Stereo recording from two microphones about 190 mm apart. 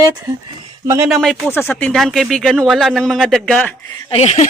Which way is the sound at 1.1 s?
Centre (ahead or behind).